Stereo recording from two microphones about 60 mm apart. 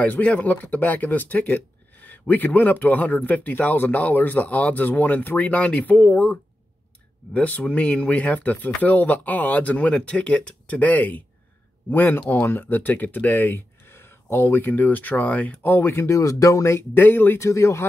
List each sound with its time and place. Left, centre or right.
0.0 s speech: left
7.3 s speech: left
15.8 s speech: left
16.2 s speech: left
16.7 s speech: left
17.4 s speech: left